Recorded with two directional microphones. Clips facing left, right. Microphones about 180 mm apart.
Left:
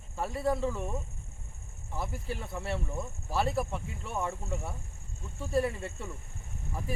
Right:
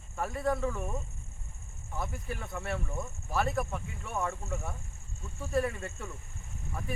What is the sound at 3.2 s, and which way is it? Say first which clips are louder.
Speech: left 1 dB; 30° left (ahead or behind).